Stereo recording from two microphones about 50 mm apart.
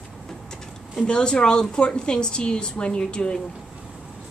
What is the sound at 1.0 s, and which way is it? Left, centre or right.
A woman's voice, centre.